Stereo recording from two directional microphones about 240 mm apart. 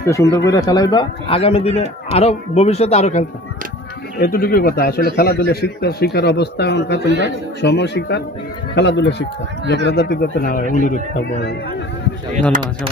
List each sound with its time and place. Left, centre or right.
0.0 s a man's voice: centre; by 11.5 s left
12.5 s speech: right